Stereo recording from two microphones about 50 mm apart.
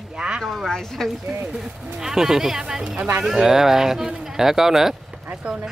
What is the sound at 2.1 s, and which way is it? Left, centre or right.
Speech, centre.